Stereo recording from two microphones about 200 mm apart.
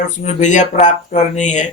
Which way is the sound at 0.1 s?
35° left (ahead or behind).